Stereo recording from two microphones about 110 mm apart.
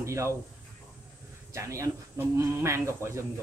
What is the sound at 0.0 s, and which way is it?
Speech, 25° right (ahead or behind).